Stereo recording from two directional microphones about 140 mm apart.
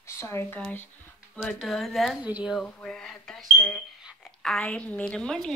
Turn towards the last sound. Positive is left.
turn(degrees=5)  # may be behind; listen again after turning